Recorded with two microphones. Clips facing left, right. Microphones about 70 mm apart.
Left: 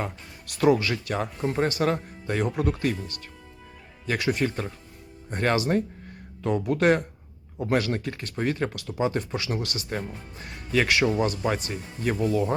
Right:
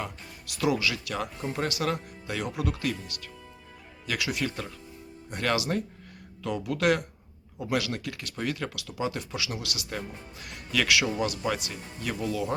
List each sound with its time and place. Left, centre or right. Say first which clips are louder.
0.0 s speech: left 4 dB; left